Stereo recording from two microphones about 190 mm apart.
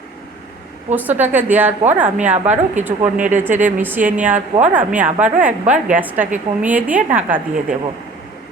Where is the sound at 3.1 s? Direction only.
45° right (ahead or behind).